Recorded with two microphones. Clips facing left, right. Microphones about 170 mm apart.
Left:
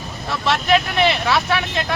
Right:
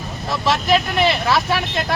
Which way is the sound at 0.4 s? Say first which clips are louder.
Even; centre (ahead or behind).